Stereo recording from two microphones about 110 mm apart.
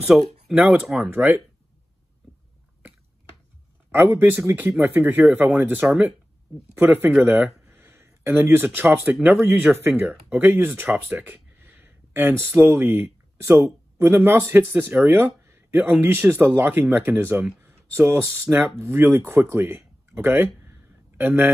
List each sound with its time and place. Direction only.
0.6 s speech: 15° right (ahead or behind)
0.8 s speech: 5° right (ahead or behind)
1.1 s speech: 15° right (ahead or behind)
3.9 s speech: 20° right (ahead or behind)
9.7 s speech: centre (ahead or behind)
10.3 s speech: 20° right (ahead or behind)
11.1 s a sound: 15° right (ahead or behind)
13.9 s speech: 20° right (ahead or behind)